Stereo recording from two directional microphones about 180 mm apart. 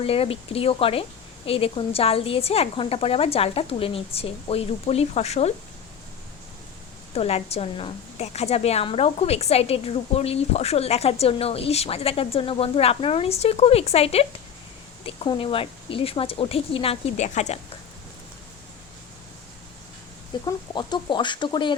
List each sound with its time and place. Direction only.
0.0 s a woman's voice: 30° left (ahead or behind)
7.1 s a woman's voice: 35° left (ahead or behind)
20.4 s speech: 25° left (ahead or behind)